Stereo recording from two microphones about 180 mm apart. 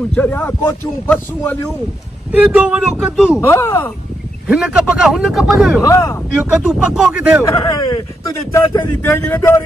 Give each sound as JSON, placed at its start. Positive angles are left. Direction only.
{"t": 0.1, "sound": "a man's voice", "side_deg": 10}
{"t": 2.3, "sound": "speech", "side_deg": -5}
{"t": 3.3, "sound": "a man's voice", "side_deg": 15}
{"t": 4.5, "sound": "speech", "side_deg": -5}
{"t": 5.8, "sound": "a man's voice", "side_deg": 15}
{"t": 6.6, "sound": "speech", "side_deg": -5}
{"t": 7.4, "sound": "a man's voice", "side_deg": 20}